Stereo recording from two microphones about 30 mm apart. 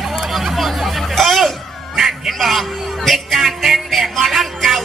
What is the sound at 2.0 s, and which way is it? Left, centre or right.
Music, centre.